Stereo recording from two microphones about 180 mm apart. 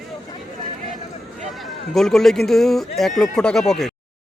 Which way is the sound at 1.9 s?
Centre (ahead or behind).